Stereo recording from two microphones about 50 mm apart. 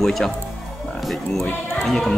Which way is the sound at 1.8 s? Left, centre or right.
Centre.